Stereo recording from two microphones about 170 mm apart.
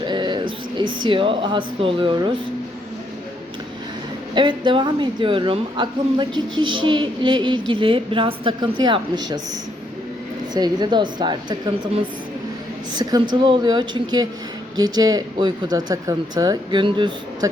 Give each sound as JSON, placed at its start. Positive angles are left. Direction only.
{"t": 0.0, "sound": "speech", "side_deg": -25}
{"t": 4.4, "sound": "a woman's voice", "side_deg": -30}
{"t": 10.5, "sound": "a woman's voice", "side_deg": -25}
{"t": 12.9, "sound": "a woman's voice", "side_deg": -25}